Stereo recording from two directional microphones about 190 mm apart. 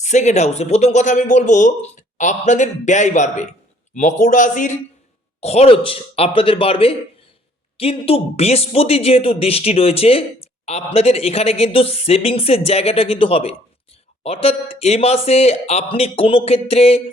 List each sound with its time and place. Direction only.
0.0 s a man's voice: 40° left (ahead or behind)